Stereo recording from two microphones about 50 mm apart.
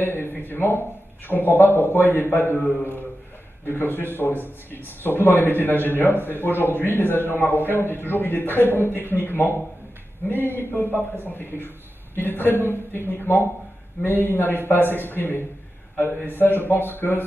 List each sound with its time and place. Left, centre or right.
0.0 s a man's voice: left